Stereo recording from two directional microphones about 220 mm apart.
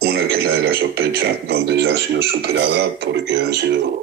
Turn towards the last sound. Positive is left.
turn(degrees=-50)  # may be behind; listen again after turning